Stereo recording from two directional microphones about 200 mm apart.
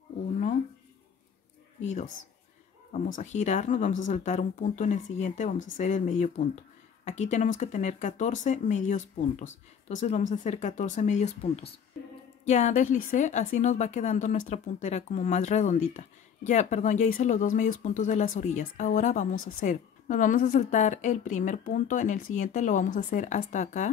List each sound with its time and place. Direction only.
1.8 s speech: 35° left (ahead or behind)